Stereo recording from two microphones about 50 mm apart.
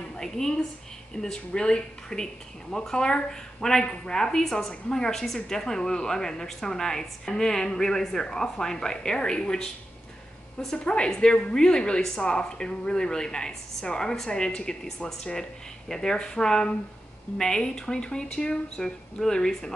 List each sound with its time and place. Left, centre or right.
0.1 s a woman's voice: centre
3.8 s a woman's voice: left
4.1 s a woman's voice: centre
10.8 s a woman's voice: centre